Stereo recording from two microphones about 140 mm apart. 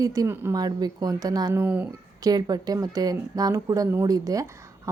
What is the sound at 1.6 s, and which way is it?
Speech, 10° right (ahead or behind).